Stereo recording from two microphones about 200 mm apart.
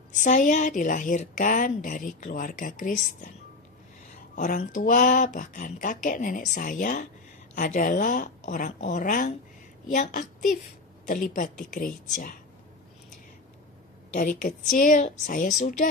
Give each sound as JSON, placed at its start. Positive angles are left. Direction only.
{"t": 0.1, "sound": "a woman's voice", "side_deg": 35}
{"t": 4.4, "sound": "a woman's voice", "side_deg": 40}
{"t": 14.4, "sound": "a woman's voice", "side_deg": 40}